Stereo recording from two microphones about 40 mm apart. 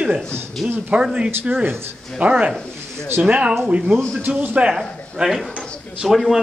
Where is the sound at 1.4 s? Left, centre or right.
Right.